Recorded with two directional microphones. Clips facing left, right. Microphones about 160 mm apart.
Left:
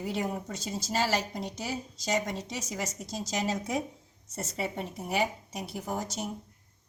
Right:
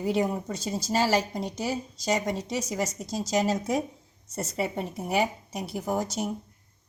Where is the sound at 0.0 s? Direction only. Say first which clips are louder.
Right 6 dB; 35° right (ahead or behind).